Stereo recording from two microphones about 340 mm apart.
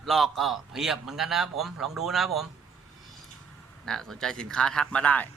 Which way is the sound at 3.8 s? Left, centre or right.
Centre.